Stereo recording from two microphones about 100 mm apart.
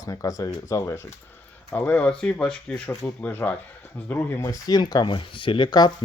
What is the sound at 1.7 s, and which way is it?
Speech, 15° left (ahead or behind).